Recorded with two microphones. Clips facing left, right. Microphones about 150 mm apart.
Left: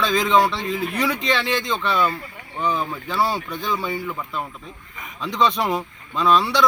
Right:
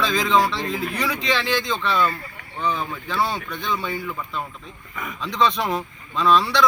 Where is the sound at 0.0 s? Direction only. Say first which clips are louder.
Left 2 dB; centre (ahead or behind).